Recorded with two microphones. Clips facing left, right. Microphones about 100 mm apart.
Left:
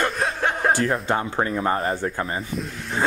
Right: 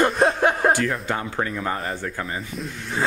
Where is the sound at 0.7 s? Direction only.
35° left (ahead or behind).